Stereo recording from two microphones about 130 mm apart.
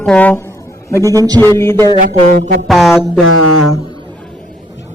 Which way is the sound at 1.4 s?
15° left (ahead or behind).